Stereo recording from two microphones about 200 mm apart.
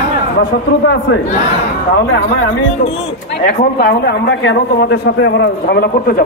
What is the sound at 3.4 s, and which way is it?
A man's voice, 50° left (ahead or behind).